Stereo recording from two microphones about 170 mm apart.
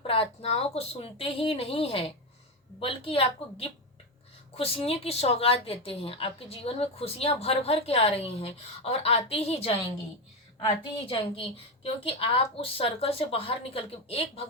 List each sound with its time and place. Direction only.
0.0 s a woman's voice: 35° left (ahead or behind)